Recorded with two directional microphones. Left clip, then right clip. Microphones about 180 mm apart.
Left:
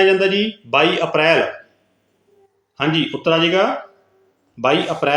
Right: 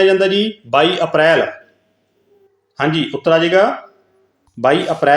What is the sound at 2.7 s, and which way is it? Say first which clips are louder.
Speech: right 2 dB; 25° right (ahead or behind).